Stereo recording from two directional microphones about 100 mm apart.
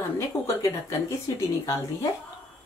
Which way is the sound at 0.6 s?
30° left (ahead or behind).